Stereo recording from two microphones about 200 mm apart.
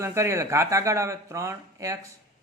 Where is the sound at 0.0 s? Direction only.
15° right (ahead or behind).